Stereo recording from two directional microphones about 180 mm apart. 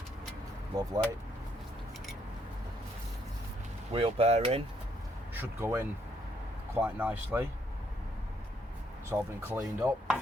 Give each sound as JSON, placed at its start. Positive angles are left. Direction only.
{"t": 0.8, "sound": "speech", "side_deg": -20}
{"t": 3.9, "sound": "speech", "side_deg": -35}
{"t": 5.3, "sound": "speech", "side_deg": -10}
{"t": 9.0, "sound": "speech", "side_deg": -10}